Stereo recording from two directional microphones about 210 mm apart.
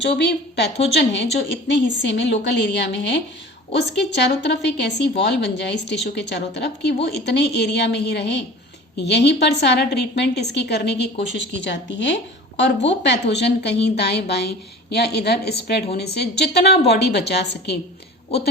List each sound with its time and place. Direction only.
0.2 s a woman's voice: 50° left (ahead or behind)